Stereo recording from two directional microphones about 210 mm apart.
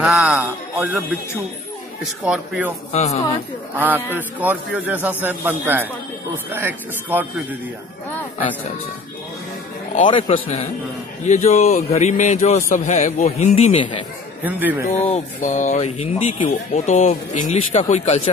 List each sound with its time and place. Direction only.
0.0 s music: 5° right (ahead or behind)
2.2 s speech: 5° right (ahead or behind)
2.9 s speech: 30° left (ahead or behind)
3.7 s a man's voice: 10° right (ahead or behind)
10.0 s a man's voice: 25° left (ahead or behind)
14.4 s a man's voice: 10° right (ahead or behind)
15.1 s speech: 35° left (ahead or behind)